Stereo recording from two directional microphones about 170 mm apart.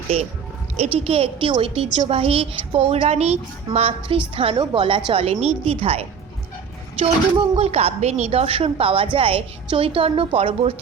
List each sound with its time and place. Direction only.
0.8 s a woman's voice: 35° right (ahead or behind)